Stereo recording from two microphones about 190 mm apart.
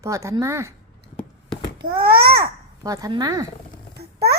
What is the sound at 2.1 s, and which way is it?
Speech, 55° right (ahead or behind).